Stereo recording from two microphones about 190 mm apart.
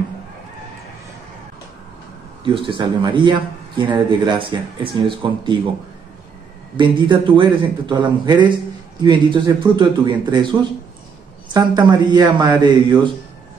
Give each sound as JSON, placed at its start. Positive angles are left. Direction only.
{"t": 2.4, "sound": "speech", "side_deg": -25}
{"t": 6.8, "sound": "speech", "side_deg": -25}